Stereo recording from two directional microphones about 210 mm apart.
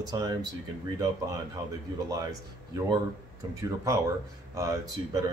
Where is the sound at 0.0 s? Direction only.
20° right (ahead or behind).